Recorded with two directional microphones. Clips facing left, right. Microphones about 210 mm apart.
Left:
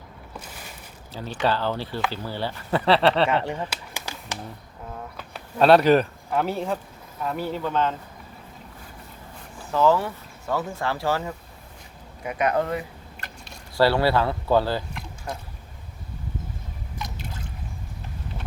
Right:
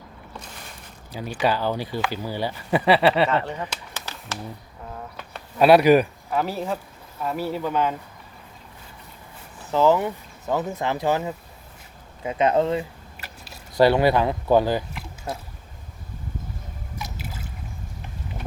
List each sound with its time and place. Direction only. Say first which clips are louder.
1.1 s speech: right 1 dB; 15° right (ahead or behind)
3.2 s speech: even; 10° left (ahead or behind)
5.5 s speech: right 2 dB; 10° right (ahead or behind)
9.7 s speech: right 2 dB; 20° right (ahead or behind)
13.1 s a sound: even; 5° right (ahead or behind)
13.7 s speech: right 3 dB; 20° right (ahead or behind)
17.0 s liquid: even; 5° right (ahead or behind)